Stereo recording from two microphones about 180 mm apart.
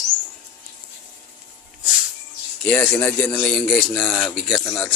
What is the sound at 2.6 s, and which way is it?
Speech, 5° left (ahead or behind).